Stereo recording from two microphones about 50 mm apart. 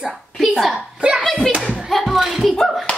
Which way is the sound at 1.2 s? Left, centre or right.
Centre.